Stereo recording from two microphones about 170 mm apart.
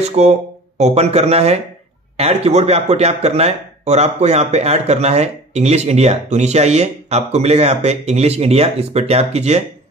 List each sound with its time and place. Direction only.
0.0 s speech: 40° right (ahead or behind)